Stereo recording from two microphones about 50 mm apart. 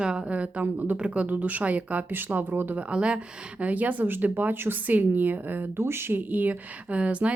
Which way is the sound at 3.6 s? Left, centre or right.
Right.